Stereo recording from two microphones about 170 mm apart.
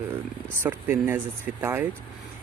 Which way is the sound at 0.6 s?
10° right (ahead or behind).